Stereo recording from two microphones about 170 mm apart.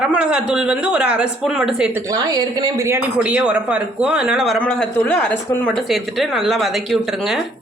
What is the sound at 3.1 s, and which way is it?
A man's voice, 5° right (ahead or behind).